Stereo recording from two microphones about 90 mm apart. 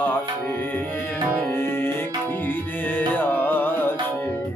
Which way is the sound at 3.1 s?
20° left (ahead or behind).